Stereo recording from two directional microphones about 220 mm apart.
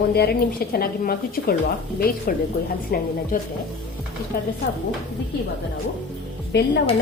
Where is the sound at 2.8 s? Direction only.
40° left (ahead or behind).